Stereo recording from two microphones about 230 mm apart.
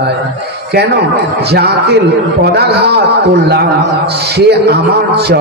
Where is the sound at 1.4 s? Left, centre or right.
Right.